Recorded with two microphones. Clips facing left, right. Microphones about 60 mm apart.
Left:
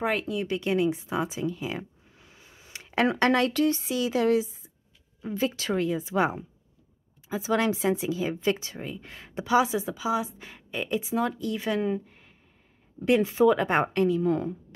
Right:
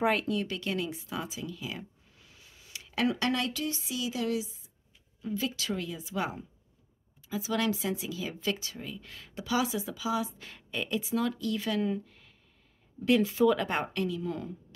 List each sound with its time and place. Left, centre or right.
0.0 s speech: centre
0.5 s a woman's voice: left
13.7 s a woman's voice: left